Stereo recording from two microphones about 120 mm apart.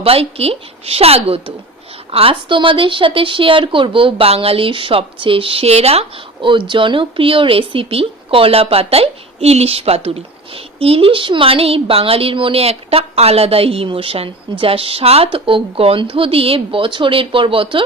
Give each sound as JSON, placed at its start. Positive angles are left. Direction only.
{"t": 0.0, "sound": "a woman's voice", "side_deg": -55}